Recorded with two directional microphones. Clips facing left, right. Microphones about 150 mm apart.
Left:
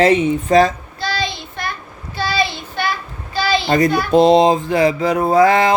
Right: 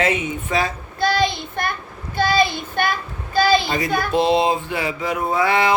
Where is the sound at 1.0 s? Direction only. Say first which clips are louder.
Right 4 dB; 55° right (ahead or behind).